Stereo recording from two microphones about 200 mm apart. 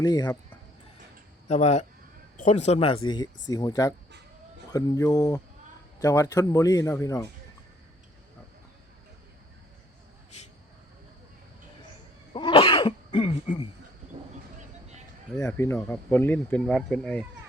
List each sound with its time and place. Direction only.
0.0 s speech: 20° left (ahead or behind)
1.5 s speech: 35° left (ahead or behind)
3.5 s speech: 20° left (ahead or behind)
12.3 s cough: 25° left (ahead or behind)
15.4 s speech: 15° left (ahead or behind)